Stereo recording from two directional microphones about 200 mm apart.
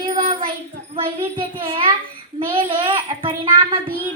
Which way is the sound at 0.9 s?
25° right (ahead or behind).